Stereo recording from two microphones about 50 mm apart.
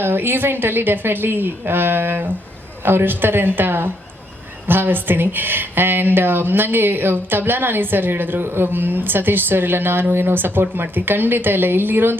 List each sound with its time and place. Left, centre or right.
0.0 s speech: right